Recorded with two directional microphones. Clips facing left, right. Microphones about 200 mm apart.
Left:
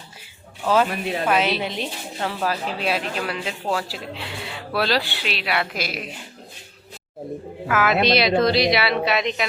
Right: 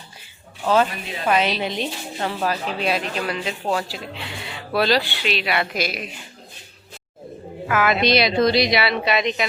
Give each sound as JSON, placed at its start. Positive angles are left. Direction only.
{"t": 0.9, "sound": "a woman's voice", "side_deg": 55}
{"t": 1.3, "sound": "a woman's voice", "side_deg": 5}
{"t": 7.7, "sound": "a woman's voice", "side_deg": 0}